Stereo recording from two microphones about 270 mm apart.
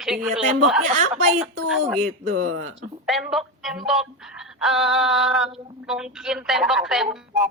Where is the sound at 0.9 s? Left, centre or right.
Right.